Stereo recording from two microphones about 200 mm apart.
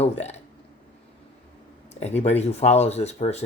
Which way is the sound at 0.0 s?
35° left (ahead or behind).